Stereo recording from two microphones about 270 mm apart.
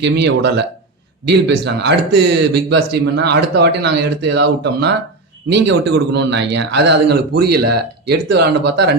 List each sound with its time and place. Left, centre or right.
0.0 s speech: right
5.9 s speech: right